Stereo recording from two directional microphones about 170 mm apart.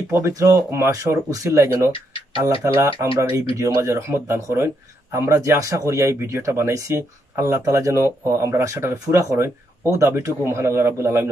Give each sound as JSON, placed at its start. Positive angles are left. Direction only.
{"t": 0.1, "sound": "speech", "side_deg": -20}
{"t": 1.9, "sound": "a sound", "side_deg": 30}
{"t": 2.6, "sound": "speech", "side_deg": -15}